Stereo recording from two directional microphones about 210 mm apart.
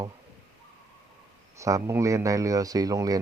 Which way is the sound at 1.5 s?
15° right (ahead or behind).